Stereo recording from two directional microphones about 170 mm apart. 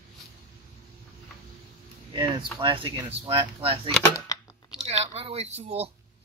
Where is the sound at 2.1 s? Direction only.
25° right (ahead or behind).